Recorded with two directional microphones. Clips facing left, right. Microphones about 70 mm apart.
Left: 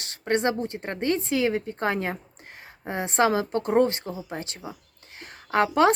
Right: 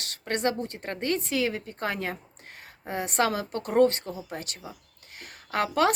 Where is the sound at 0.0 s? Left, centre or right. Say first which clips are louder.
Left 4 dB; left.